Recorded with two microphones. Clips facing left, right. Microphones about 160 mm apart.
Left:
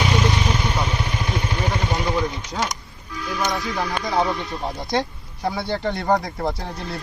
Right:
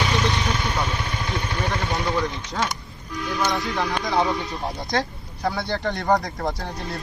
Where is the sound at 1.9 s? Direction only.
Centre (ahead or behind).